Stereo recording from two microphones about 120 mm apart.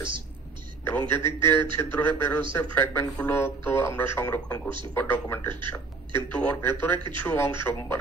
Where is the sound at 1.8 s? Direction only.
15° left (ahead or behind).